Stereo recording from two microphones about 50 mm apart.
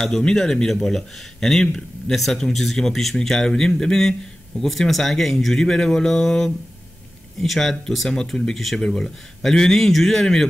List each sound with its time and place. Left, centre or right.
0.2 s speech: centre